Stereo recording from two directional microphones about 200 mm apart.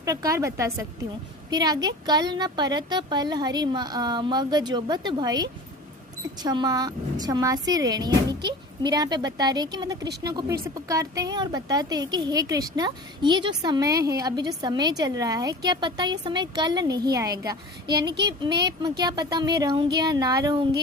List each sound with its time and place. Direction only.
0.0 s a woman's voice: 15° right (ahead or behind)
18.1 s speech: 55° right (ahead or behind)
18.8 s a woman's voice: 20° right (ahead or behind)